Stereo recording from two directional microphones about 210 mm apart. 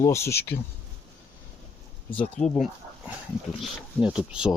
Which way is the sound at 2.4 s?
35° left (ahead or behind).